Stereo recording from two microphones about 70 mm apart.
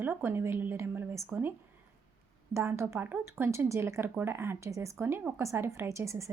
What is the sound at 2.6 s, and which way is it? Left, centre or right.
Speech, right.